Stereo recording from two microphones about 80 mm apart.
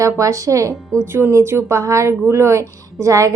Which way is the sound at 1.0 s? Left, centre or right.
Right.